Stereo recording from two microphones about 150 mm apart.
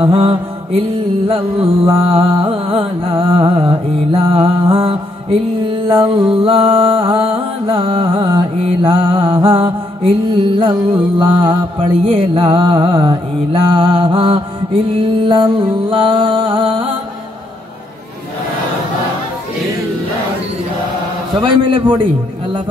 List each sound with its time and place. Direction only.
0.0 s music: 35° right (ahead or behind)
21.4 s music: 35° right (ahead or behind)